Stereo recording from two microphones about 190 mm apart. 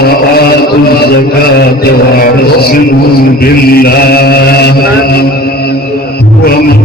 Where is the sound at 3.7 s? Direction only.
55° left (ahead or behind).